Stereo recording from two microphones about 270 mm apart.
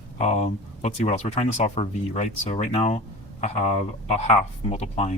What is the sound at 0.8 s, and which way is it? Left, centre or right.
Speech, left.